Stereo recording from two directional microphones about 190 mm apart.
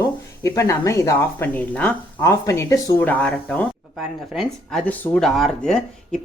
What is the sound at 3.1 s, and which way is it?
Speech, 5° left (ahead or behind).